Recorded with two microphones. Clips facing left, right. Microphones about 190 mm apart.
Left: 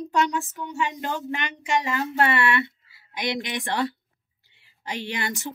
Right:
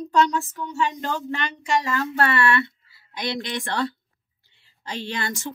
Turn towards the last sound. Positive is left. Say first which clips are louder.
# right 1 dB
turn(degrees=15)  # may be behind; listen again after turning